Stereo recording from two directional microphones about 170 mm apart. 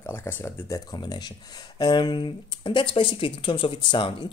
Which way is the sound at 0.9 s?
25° left (ahead or behind).